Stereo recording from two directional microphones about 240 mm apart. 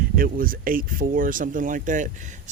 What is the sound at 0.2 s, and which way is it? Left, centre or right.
Speech, right.